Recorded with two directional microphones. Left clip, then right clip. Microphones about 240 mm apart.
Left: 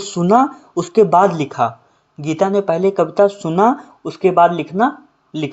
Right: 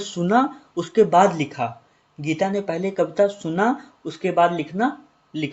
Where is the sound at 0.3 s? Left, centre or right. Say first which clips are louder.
Left 7 dB; left.